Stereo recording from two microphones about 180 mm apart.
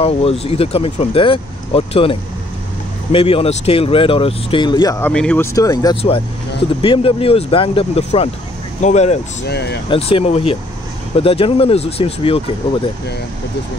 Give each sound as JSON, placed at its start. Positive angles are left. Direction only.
{"t": 0.0, "sound": "speech", "side_deg": 35}
{"t": 5.1, "sound": "speech", "side_deg": 5}
{"t": 9.5, "sound": "speech", "side_deg": 65}
{"t": 9.8, "sound": "speech", "side_deg": 30}